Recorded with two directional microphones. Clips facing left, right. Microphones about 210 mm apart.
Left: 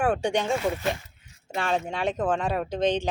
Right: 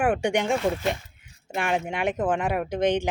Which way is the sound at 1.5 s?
15° right (ahead or behind).